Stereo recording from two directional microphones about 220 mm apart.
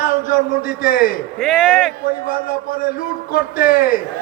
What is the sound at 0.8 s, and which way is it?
Speech, 40° left (ahead or behind).